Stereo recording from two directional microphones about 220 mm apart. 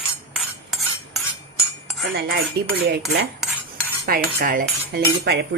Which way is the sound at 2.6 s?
45° right (ahead or behind).